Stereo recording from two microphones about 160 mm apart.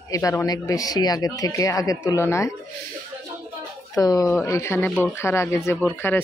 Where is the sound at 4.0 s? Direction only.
25° left (ahead or behind).